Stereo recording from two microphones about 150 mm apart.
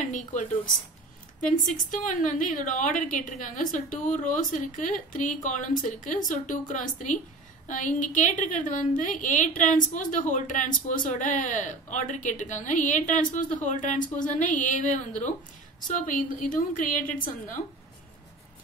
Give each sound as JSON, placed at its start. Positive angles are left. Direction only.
{"t": 0.1, "sound": "a woman's voice", "side_deg": 55}
{"t": 1.6, "sound": "a woman's voice", "side_deg": 60}